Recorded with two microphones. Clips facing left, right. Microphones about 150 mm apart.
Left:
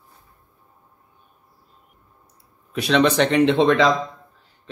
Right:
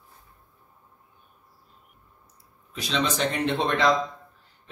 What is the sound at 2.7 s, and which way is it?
Speech, 65° left (ahead or behind).